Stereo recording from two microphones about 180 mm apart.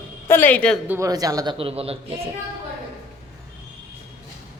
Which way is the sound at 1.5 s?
30° right (ahead or behind).